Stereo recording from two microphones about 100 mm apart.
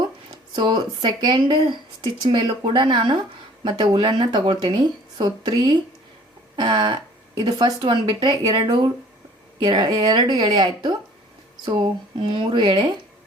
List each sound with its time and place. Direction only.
0.5 s speech: 50° right (ahead or behind)
12.1 s speech: 50° right (ahead or behind)